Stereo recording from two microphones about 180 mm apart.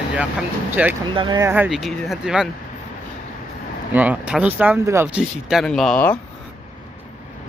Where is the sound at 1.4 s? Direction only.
10° right (ahead or behind).